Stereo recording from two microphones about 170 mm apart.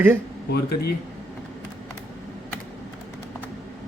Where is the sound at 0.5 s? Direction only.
70° left (ahead or behind).